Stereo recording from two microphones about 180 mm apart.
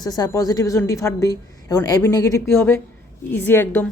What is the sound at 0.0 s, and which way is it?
A woman's voice, 20° left (ahead or behind).